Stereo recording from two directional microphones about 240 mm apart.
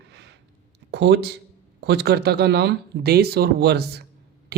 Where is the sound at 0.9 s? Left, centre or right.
Right.